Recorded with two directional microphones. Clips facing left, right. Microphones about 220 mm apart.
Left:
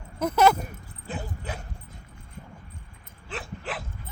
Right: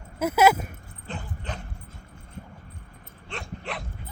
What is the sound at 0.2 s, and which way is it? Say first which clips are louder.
Speech: right 1 dB; 5° right (ahead or behind).